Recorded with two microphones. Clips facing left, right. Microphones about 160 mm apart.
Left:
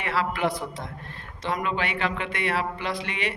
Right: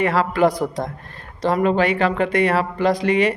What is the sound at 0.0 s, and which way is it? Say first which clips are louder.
Speech: right 9 dB; 45° right (ahead or behind).